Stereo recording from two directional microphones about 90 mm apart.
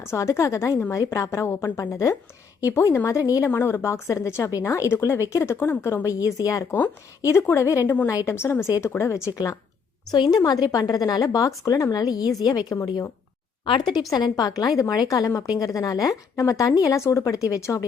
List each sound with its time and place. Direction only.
0.0 s a woman's voice: 30° left (ahead or behind)
3.2 s a woman's voice: 40° left (ahead or behind)
3.5 s a woman's voice: 25° left (ahead or behind)
10.1 s a woman's voice: 50° left (ahead or behind)